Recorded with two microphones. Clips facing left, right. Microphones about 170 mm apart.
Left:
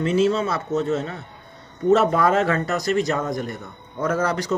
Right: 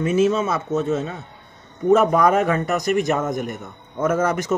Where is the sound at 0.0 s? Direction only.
20° right (ahead or behind).